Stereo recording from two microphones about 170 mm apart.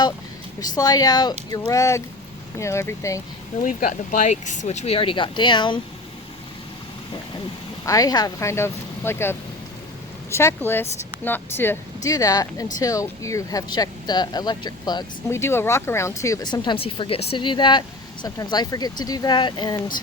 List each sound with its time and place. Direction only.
0.8 s speech: 20° left (ahead or behind)
3.6 s speech: 50° left (ahead or behind); by 5.8 s 25° left (ahead or behind)
7.9 s speech: 20° left (ahead or behind)
10.3 s speech: 15° left (ahead or behind)